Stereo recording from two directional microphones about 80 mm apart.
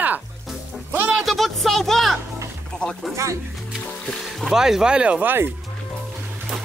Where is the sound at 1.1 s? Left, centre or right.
Centre.